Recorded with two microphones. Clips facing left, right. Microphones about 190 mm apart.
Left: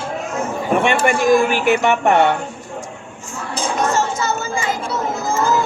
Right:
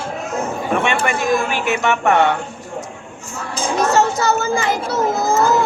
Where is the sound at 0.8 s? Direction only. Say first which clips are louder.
Left 3 dB; 50° left (ahead or behind).